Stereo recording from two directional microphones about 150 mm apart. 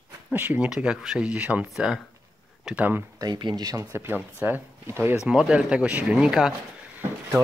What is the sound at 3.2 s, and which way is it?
Speech, 30° right (ahead or behind).